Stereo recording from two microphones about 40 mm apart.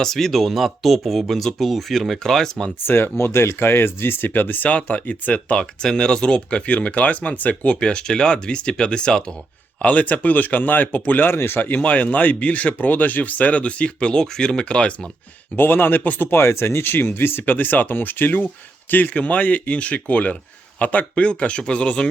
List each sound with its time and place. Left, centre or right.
0.0 s speech: centre
2.8 s speech: left
5.5 s speech: centre; by 7.7 s left
7.7 s speech: left
9.8 s speech: left
11.3 s speech: left
11.8 s speech: left
15.5 s speech: left
16.3 s speech: left
17.4 s speech: left